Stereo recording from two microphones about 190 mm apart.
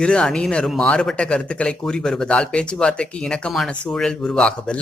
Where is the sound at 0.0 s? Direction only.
5° left (ahead or behind).